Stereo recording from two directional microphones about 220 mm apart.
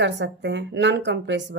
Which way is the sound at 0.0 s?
55° right (ahead or behind).